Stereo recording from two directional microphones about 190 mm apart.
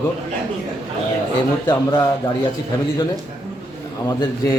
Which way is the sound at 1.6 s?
20° left (ahead or behind).